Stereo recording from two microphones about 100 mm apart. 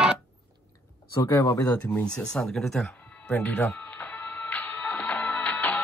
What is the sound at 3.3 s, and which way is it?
Music, 20° left (ahead or behind).